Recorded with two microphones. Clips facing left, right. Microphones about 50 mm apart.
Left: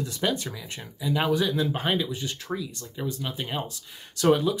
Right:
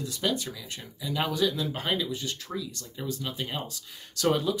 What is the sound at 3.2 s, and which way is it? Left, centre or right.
Speech, centre.